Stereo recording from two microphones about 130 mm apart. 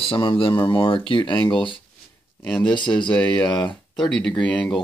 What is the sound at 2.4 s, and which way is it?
Speech, 5° left (ahead or behind).